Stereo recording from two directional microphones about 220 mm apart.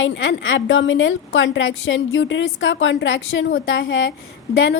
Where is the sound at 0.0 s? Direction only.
60° left (ahead or behind).